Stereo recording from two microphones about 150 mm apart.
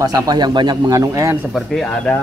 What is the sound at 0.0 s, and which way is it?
Speech, 25° right (ahead or behind).